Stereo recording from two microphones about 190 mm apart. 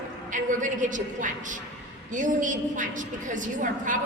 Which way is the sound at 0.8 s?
40° right (ahead or behind).